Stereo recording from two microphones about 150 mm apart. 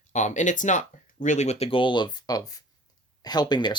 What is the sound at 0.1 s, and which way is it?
Speech, 55° left (ahead or behind).